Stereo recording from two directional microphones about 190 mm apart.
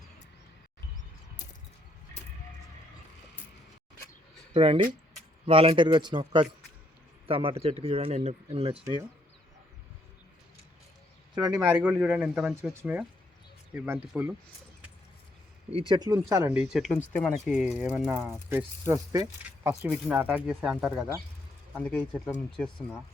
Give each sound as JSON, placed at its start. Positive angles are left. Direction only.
{"t": 4.5, "sound": "a man's voice", "side_deg": -30}
{"t": 11.3, "sound": "speech", "side_deg": -20}
{"t": 11.8, "sound": "speech", "side_deg": -5}
{"t": 15.9, "sound": "speech", "side_deg": -20}
{"t": 17.5, "sound": "speech", "side_deg": -5}
{"t": 19.5, "sound": "speech", "side_deg": -10}
{"t": 21.8, "sound": "speech", "side_deg": 5}